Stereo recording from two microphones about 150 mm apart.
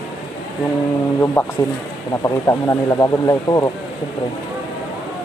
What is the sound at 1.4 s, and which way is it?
Speech, 10° left (ahead or behind).